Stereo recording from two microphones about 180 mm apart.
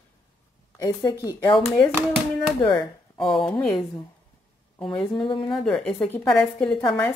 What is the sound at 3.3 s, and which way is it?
Speech, 5° left (ahead or behind).